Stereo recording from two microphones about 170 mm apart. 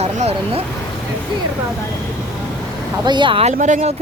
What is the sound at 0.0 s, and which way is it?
Speech, 40° right (ahead or behind).